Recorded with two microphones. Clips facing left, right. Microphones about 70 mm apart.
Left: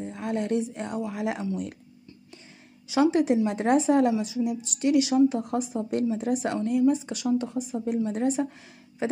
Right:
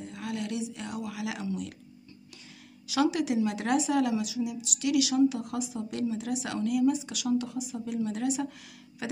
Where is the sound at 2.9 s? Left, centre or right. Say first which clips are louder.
Left 5 dB; left.